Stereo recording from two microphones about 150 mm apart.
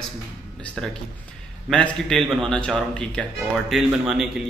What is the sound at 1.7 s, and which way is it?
A man's voice, 5° left (ahead or behind).